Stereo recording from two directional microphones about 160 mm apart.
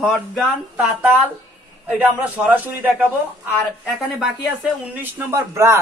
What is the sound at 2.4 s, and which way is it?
Speech, 10° right (ahead or behind).